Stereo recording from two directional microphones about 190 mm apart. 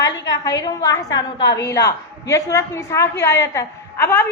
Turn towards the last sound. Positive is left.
turn(degrees=10)  # may be behind; listen again after turning